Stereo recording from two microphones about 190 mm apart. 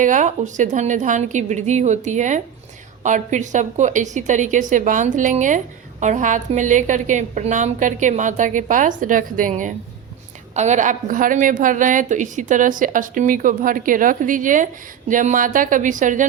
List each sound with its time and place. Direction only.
0.0 s a woman's voice: 40° right (ahead or behind)